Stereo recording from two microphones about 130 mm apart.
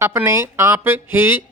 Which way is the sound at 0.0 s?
20° right (ahead or behind).